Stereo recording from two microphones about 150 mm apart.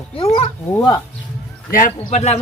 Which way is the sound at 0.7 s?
20° left (ahead or behind).